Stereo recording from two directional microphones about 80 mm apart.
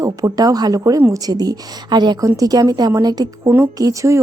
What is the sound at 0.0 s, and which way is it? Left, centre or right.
A woman's voice, right.